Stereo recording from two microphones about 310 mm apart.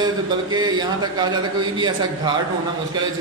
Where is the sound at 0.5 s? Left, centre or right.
Centre.